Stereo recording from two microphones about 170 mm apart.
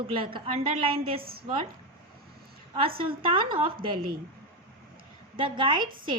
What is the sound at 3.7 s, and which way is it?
Speech, 55° right (ahead or behind).